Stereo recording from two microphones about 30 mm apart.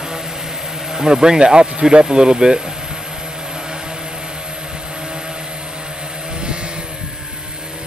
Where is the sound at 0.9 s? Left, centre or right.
Right.